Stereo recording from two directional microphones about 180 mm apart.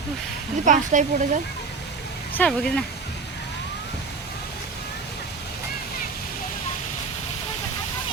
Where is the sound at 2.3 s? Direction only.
5° left (ahead or behind).